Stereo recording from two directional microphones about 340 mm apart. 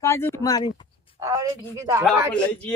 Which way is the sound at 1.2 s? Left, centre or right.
Centre.